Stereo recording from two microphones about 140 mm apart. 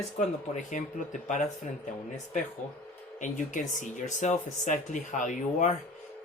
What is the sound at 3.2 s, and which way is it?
Speech, 65° left (ahead or behind).